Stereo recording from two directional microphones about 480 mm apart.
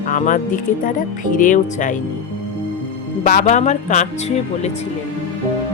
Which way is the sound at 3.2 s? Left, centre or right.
Centre.